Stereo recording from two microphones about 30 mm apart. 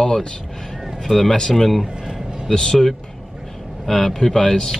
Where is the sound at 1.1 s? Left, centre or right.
Centre.